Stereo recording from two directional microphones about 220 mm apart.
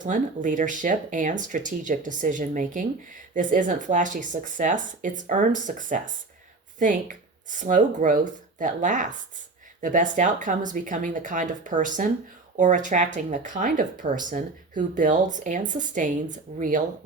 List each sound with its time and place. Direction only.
0.0 s speech: 35° right (ahead or behind)